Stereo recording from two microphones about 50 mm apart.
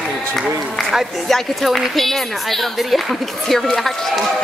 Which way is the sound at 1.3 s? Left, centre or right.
Centre.